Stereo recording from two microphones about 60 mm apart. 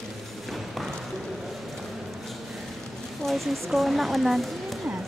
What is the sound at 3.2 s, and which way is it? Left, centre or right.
Speech, centre.